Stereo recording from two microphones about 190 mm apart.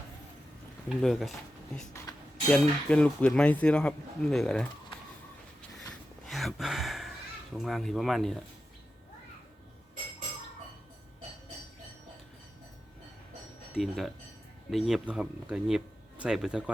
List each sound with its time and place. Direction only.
0.9 s speech: centre (ahead or behind)
5.9 s a sound: centre (ahead or behind)
7.5 s speech: centre (ahead or behind)
13.7 s speech: centre (ahead or behind)